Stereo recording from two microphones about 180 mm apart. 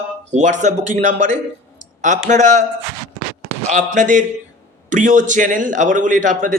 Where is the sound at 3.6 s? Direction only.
45° right (ahead or behind).